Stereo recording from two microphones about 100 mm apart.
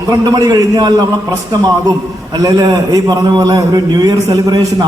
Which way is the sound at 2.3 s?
40° right (ahead or behind).